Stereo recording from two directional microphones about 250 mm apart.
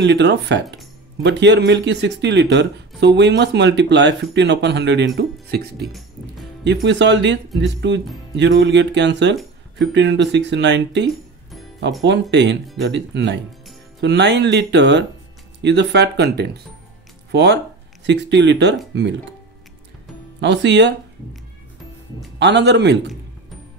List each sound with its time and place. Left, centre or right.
0.0 s speech: right
20.3 s speech: right
22.4 s speech: right